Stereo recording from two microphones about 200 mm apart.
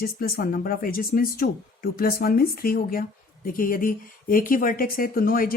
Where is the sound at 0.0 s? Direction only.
50° left (ahead or behind).